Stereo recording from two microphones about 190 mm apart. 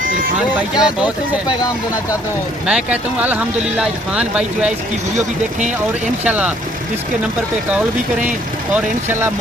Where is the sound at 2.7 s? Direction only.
5° right (ahead or behind).